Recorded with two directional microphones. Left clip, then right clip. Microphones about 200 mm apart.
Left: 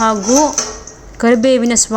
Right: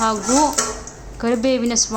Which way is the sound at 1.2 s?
25° left (ahead or behind).